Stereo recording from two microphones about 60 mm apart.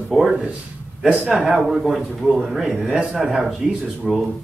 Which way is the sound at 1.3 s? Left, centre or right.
Centre.